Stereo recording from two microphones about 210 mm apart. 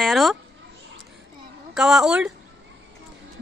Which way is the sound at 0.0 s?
Centre (ahead or behind).